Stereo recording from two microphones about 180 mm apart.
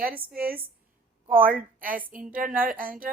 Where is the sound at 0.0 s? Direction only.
55° right (ahead or behind).